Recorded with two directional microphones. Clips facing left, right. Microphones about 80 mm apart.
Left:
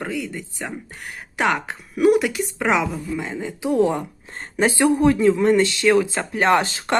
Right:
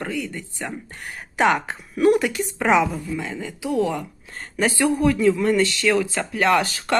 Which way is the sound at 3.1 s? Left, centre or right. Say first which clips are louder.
Left 2 dB; left.